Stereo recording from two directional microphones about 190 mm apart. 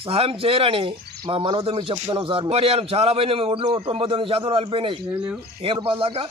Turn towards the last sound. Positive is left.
turn(degrees=-30)  # may be behind; listen again after turning